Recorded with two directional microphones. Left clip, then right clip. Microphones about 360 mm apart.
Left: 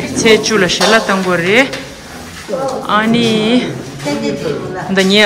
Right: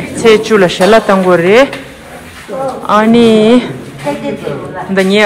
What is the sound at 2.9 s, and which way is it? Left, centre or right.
Speech, centre.